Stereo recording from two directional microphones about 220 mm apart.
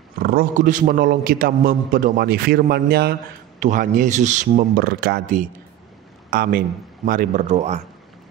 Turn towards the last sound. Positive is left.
turn(degrees=-30)  # may be behind; listen again after turning